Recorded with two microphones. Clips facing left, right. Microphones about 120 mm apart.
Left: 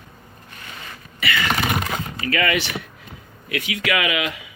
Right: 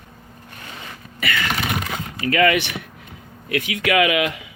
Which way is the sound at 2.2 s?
50° right (ahead or behind).